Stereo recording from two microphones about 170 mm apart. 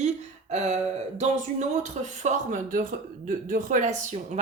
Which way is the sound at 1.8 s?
45° right (ahead or behind).